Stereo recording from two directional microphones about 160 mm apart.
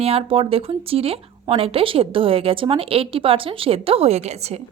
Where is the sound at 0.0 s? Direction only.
35° right (ahead or behind).